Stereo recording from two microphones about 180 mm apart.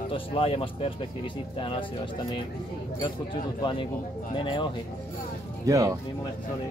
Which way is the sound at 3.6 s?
25° left (ahead or behind).